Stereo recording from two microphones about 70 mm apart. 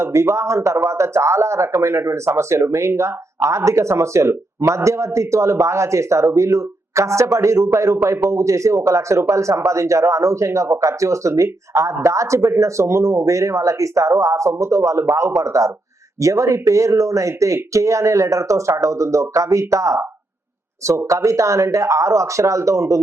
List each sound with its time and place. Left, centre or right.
0.0 s speech: right
21.1 s speech: right